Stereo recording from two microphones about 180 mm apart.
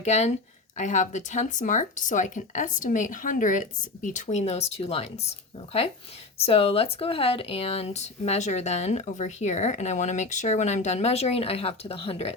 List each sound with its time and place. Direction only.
0.0 s speech: 40° left (ahead or behind)
6.4 s speech: 30° left (ahead or behind)